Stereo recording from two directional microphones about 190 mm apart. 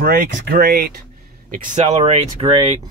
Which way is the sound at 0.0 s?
50° right (ahead or behind).